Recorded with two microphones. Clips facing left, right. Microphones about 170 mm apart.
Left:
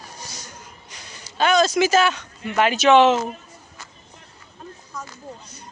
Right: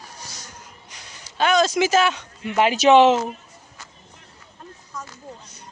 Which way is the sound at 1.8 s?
15° right (ahead or behind).